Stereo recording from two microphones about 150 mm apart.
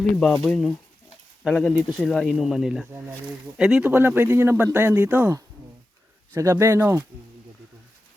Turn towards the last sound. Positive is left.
turn(degrees=-15)  # may be behind; listen again after turning